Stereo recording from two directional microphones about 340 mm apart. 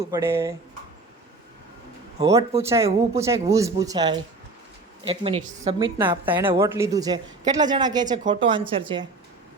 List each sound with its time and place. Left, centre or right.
0.0 s a woman's voice: centre
2.1 s a woman's voice: centre
5.4 s a woman's voice: right
6.0 s a woman's voice: centre